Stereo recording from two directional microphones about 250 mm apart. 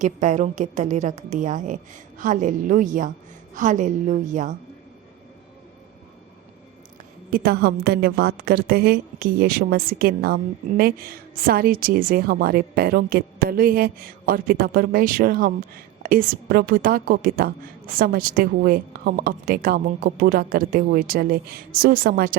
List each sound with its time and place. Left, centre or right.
0.0 s a woman's voice: right
7.3 s a woman's voice: right